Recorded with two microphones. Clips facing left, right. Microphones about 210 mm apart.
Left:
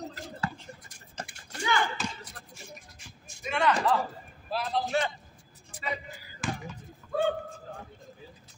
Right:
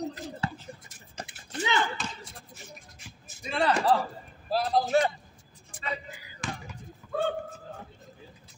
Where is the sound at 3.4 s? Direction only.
30° right (ahead or behind).